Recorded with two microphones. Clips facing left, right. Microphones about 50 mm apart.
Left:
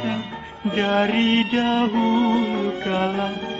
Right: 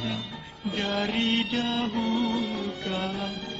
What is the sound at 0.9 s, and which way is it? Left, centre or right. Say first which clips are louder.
Music: left 8 dB; left.